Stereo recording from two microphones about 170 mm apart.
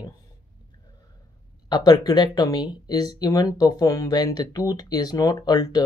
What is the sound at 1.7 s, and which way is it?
Speech, 25° left (ahead or behind).